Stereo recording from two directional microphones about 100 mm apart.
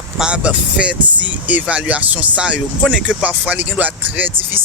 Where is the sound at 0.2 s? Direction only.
10° right (ahead or behind).